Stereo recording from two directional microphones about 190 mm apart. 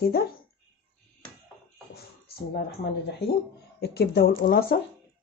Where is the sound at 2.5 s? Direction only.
60° left (ahead or behind).